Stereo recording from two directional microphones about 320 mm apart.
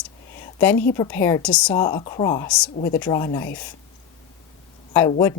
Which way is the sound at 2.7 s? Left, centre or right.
Left.